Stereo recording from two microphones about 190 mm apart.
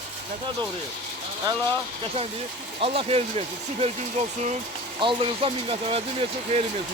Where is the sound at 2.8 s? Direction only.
30° right (ahead or behind).